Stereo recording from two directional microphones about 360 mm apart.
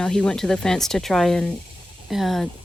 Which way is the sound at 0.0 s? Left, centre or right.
Centre.